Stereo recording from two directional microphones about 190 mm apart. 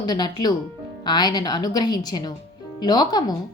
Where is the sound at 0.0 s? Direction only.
20° left (ahead or behind).